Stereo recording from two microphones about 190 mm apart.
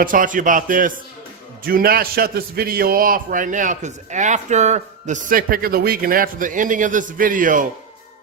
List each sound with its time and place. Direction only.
0.0 s a man's voice: 45° right (ahead or behind)